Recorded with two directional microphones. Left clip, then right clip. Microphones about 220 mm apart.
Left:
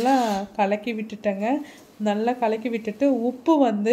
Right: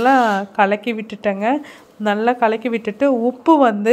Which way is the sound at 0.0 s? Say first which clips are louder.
Right 7 dB; 15° right (ahead or behind).